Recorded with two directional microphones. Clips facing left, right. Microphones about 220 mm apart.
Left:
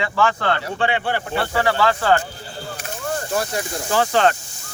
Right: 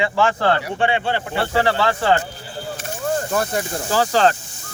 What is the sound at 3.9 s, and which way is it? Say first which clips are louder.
Speech: even; 35° right (ahead or behind).